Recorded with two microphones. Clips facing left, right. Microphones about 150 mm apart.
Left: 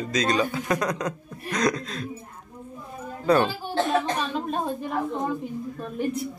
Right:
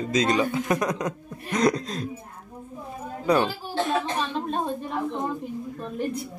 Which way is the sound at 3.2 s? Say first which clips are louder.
Left 1 dB; 10° right (ahead or behind).